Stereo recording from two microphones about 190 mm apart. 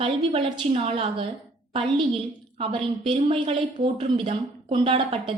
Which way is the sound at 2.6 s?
30° right (ahead or behind).